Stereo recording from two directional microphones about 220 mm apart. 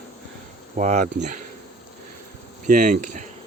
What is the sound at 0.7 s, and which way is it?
Speech, 35° right (ahead or behind).